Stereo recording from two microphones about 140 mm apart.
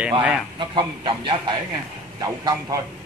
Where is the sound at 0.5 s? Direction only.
35° right (ahead or behind).